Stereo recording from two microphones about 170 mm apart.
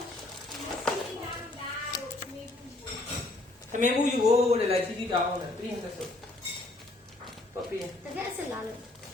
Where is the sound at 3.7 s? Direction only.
45° right (ahead or behind).